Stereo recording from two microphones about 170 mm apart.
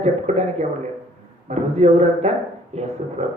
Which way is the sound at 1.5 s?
40° right (ahead or behind).